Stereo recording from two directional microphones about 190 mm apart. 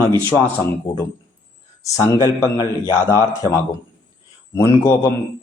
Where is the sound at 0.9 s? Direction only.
20° left (ahead or behind).